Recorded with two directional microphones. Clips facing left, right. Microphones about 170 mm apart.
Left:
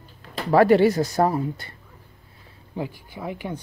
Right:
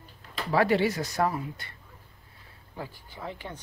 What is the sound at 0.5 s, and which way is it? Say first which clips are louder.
Speech: left 8 dB; 50° left (ahead or behind).